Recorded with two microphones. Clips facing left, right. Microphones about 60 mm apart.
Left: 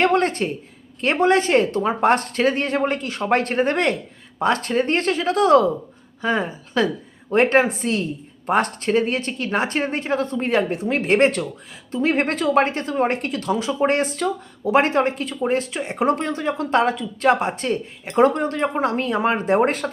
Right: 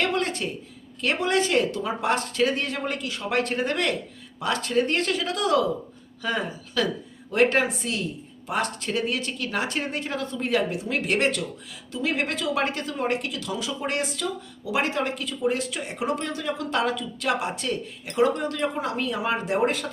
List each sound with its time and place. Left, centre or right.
0.0 s speech: left